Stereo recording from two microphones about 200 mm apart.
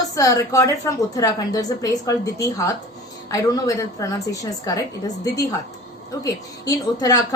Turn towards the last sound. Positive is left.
turn(degrees=15)  # may be behind; listen again after turning